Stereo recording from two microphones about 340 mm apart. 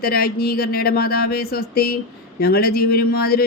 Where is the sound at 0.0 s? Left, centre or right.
Left.